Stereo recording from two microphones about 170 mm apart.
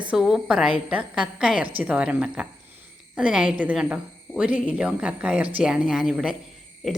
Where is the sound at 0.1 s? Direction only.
5° right (ahead or behind).